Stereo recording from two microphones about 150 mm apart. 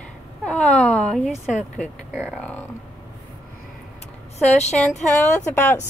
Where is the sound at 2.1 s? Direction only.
10° right (ahead or behind).